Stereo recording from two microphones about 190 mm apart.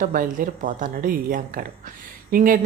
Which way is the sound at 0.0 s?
45° right (ahead or behind).